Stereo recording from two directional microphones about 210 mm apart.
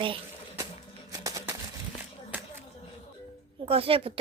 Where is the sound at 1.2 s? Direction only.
15° right (ahead or behind).